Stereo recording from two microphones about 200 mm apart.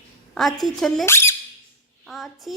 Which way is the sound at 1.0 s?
10° left (ahead or behind).